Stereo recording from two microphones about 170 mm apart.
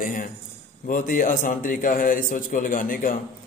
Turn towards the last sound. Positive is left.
turn(degrees=55)  # may be behind; listen again after turning